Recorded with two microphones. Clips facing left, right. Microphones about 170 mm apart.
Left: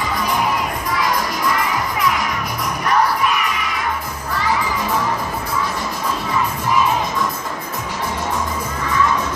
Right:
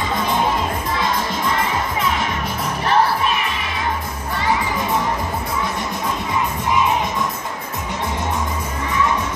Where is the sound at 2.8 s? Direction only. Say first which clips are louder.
Even; 30° right (ahead or behind).